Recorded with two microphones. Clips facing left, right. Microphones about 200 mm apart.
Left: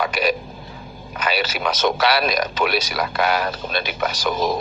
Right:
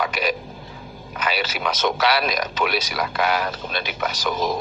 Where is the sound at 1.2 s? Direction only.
40° left (ahead or behind).